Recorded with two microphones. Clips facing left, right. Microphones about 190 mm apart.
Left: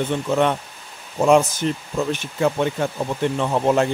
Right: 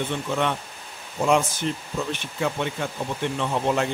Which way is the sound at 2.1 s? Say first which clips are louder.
Left 7 dB; 40° left (ahead or behind).